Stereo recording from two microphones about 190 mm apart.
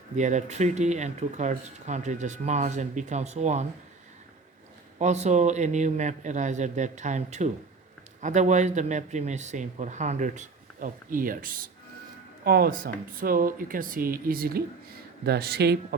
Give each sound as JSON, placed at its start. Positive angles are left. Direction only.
{"t": 0.2, "sound": "speech", "side_deg": -40}
{"t": 4.9, "sound": "speech", "side_deg": -35}